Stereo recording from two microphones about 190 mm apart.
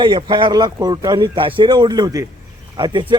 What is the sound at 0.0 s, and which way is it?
Speech, 25° right (ahead or behind).